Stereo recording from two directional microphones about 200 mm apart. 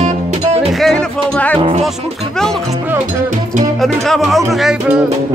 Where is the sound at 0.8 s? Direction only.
5° left (ahead or behind).